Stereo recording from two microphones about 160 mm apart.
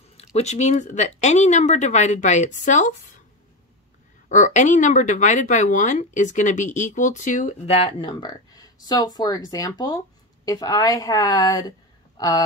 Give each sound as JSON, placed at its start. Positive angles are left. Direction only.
{"t": 0.2, "sound": "speech", "side_deg": 45}
{"t": 4.3, "sound": "a woman's voice", "side_deg": 50}